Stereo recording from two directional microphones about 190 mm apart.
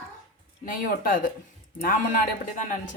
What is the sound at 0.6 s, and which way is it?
A man's voice, 45° left (ahead or behind).